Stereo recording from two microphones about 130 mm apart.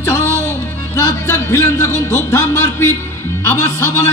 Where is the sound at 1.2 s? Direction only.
20° left (ahead or behind).